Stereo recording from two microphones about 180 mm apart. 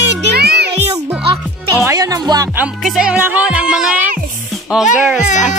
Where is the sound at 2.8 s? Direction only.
5° right (ahead or behind).